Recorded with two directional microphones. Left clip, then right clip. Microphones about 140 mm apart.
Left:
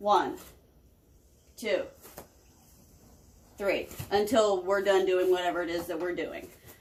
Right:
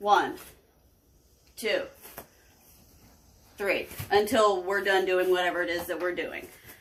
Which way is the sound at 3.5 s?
25° left (ahead or behind).